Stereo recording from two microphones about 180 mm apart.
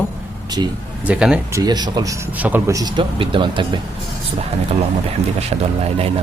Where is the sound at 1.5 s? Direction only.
20° right (ahead or behind).